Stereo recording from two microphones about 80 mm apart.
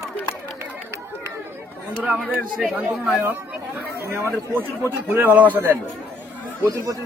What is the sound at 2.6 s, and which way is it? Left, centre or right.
Speech, centre.